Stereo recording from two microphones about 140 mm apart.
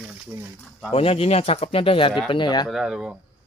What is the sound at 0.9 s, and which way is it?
Speech, 45° left (ahead or behind).